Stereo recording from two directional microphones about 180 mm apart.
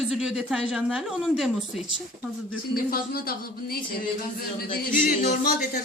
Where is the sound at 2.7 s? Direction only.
55° left (ahead or behind).